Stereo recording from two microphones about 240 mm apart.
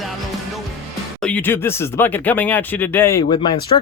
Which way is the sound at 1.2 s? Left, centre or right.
Centre.